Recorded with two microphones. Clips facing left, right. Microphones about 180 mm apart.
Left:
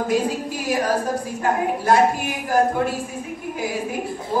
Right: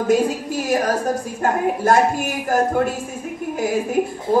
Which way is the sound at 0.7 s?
45° right (ahead or behind).